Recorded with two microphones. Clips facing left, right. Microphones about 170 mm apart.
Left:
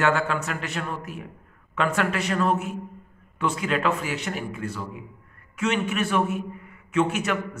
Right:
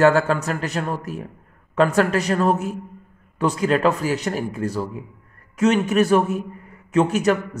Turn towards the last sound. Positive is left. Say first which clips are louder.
# right 7 dB
turn(degrees=-40)  # may be behind; listen again after turning